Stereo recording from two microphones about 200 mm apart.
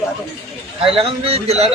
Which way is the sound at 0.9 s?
30° right (ahead or behind).